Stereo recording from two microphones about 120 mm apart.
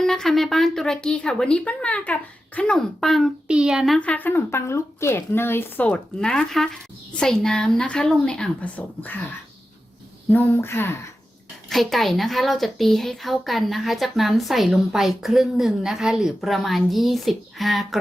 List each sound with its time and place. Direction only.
0.0 s speech: 5° left (ahead or behind)
10.2 s speech: 15° left (ahead or behind)
11.7 s speech: centre (ahead or behind)